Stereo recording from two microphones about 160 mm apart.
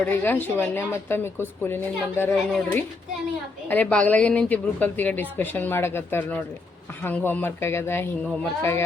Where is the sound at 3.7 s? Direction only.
10° left (ahead or behind).